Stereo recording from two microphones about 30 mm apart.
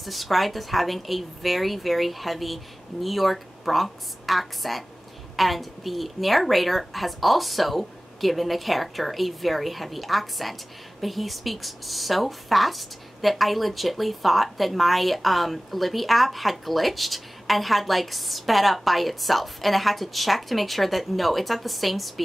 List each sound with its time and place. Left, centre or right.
0.0 s a woman's voice: centre